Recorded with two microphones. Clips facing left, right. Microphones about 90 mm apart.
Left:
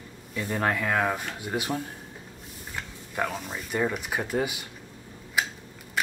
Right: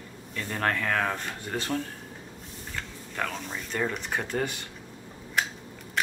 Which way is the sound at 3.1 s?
15° left (ahead or behind).